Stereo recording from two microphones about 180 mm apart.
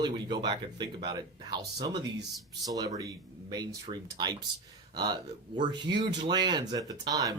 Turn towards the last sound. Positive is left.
turn(degrees=-20)  # may be behind; listen again after turning